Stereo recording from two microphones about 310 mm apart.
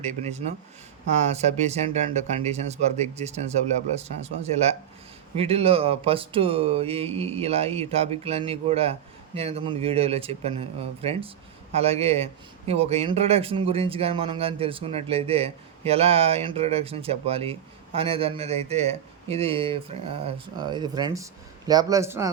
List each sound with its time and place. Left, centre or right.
0.0 s a man's voice: right